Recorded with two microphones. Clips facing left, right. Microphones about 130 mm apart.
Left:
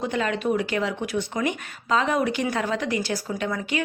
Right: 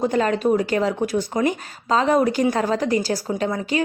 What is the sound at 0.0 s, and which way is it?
A woman's voice, 40° right (ahead or behind).